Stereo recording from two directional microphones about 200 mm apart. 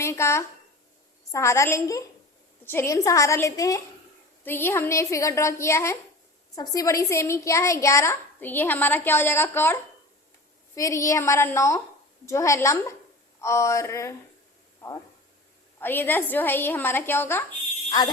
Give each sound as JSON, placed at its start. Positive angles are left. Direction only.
{"t": 0.0, "sound": "a sound", "side_deg": 15}
{"t": 1.3, "sound": "a woman's voice", "side_deg": 15}
{"t": 10.8, "sound": "a woman's voice", "side_deg": 15}
{"t": 15.8, "sound": "a woman's voice", "side_deg": 10}